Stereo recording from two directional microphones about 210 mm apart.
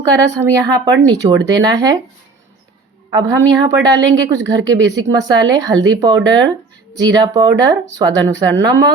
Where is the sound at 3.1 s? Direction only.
20° right (ahead or behind).